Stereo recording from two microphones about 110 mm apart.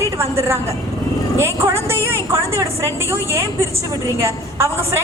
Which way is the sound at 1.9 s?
25° right (ahead or behind).